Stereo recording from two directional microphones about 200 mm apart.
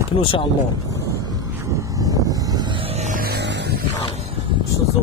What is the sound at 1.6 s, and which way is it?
Vehicle, 15° right (ahead or behind).